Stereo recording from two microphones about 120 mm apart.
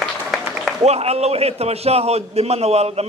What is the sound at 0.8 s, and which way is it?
A man's voice, 60° right (ahead or behind).